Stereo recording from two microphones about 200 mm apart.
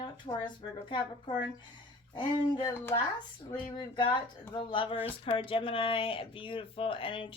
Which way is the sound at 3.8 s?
25° left (ahead or behind).